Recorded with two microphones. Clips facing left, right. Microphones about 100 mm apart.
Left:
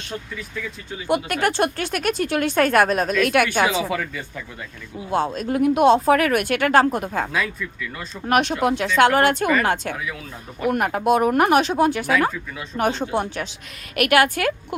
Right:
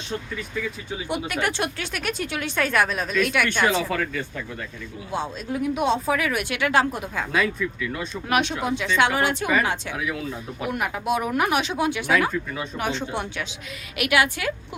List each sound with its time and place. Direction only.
1.0 s speech: 55° left (ahead or behind)
3.6 s speech: 5° left (ahead or behind)
5.1 s speech: 55° left (ahead or behind)
7.3 s speech: 5° right (ahead or behind)
8.1 s speech: 45° left (ahead or behind)
9.9 s speech: 5° right (ahead or behind)
10.7 s a woman's voice: 50° left (ahead or behind)
13.9 s speech: 50° left (ahead or behind)